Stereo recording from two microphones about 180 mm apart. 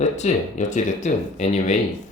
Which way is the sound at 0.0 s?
40° left (ahead or behind).